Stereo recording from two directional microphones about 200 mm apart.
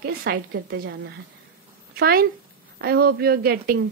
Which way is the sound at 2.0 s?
50° right (ahead or behind).